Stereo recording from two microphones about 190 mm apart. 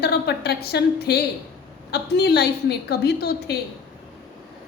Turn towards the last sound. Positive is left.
turn(degrees=55)  # may be behind; listen again after turning